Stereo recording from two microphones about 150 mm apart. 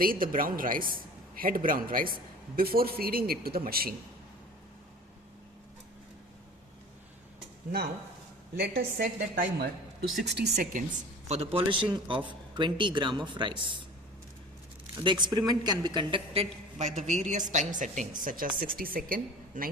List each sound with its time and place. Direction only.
0.0 s a woman's voice: 70° right (ahead or behind)
2.6 s a man's voice: 85° right
8.5 s a man's voice: 90° right
11.3 s a man's voice: 40° right (ahead or behind)
14.9 s a man's voice: 30° right (ahead or behind); by 18.1 s 55° right (ahead or behind)
18.2 s a woman's voice: 65° right (ahead or behind)